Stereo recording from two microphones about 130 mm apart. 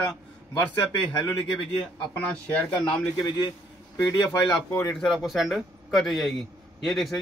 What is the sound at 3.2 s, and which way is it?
Speech, 35° left (ahead or behind).